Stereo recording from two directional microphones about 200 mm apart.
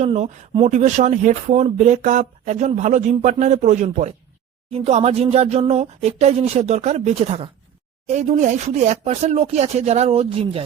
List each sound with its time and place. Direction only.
0.0 s speech: 35° right (ahead or behind)